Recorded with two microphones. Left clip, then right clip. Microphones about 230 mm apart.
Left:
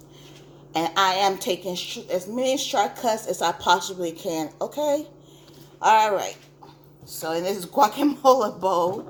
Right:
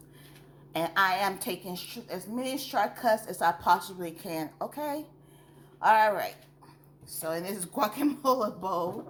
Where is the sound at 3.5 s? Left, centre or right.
Right.